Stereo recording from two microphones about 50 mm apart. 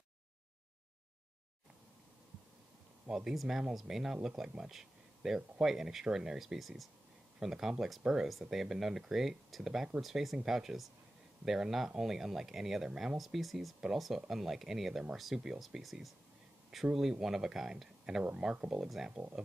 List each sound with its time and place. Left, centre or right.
3.1 s speech: centre